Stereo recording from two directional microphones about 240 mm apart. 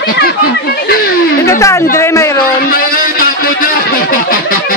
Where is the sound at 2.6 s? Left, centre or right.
Left.